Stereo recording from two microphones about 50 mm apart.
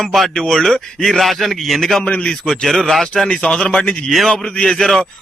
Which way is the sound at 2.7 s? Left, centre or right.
Centre.